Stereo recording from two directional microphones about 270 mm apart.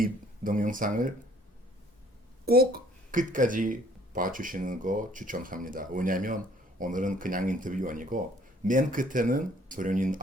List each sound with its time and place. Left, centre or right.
0.0 s speech: right
2.5 s speech: right